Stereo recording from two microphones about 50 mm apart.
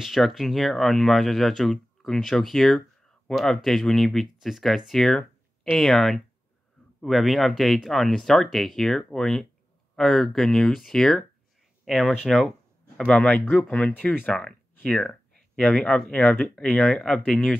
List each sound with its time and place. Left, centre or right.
0.0 s speech: centre
13.0 s speech: left
13.7 s speech: centre
14.3 s a sound: centre
16.3 s speech: centre